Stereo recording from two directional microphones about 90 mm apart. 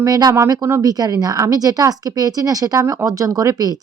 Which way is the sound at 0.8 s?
45° right (ahead or behind).